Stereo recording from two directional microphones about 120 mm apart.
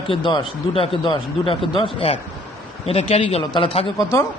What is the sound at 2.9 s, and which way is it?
Speech, 55° left (ahead or behind).